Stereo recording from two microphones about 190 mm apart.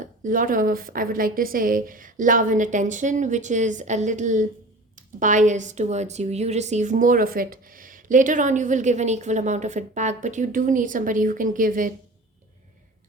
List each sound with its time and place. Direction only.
0.3 s a woman's voice: 45° right (ahead or behind)